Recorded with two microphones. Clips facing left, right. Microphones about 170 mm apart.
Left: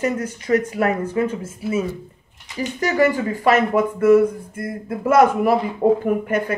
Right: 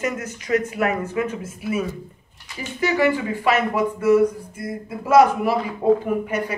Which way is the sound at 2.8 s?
45° left (ahead or behind).